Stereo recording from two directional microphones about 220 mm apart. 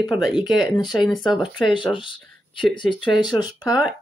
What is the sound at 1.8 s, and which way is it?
Speech, 20° left (ahead or behind).